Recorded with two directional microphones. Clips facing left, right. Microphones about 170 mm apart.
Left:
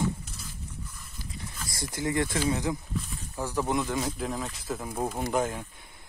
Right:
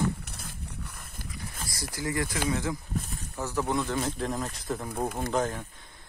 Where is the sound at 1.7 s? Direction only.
25° left (ahead or behind).